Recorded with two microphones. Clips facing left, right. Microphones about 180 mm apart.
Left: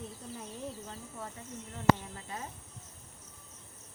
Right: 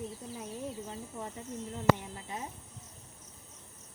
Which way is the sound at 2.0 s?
15° right (ahead or behind).